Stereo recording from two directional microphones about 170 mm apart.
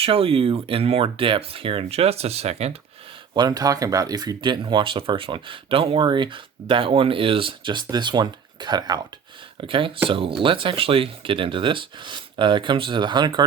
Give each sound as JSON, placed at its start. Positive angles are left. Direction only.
{"t": 0.0, "sound": "speech", "side_deg": -35}
{"t": 3.3, "sound": "speech", "side_deg": -20}